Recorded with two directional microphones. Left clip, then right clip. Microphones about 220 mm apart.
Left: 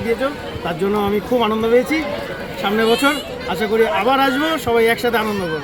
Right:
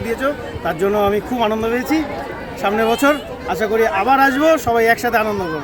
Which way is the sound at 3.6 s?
5° right (ahead or behind).